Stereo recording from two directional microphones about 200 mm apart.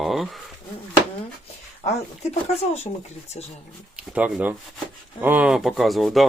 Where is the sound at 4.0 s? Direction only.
5° right (ahead or behind).